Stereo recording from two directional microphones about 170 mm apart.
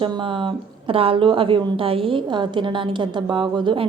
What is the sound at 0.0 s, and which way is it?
A woman's voice, 30° right (ahead or behind).